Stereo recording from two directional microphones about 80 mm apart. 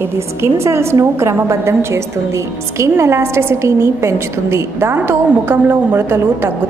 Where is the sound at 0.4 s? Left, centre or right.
Right.